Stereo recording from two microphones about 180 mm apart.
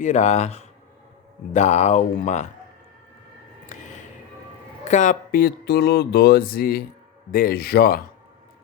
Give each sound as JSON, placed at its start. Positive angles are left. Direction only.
{"t": 0.0, "sound": "speech", "side_deg": 40}
{"t": 3.7, "sound": "a sound", "side_deg": 45}
{"t": 4.9, "sound": "speech", "side_deg": 45}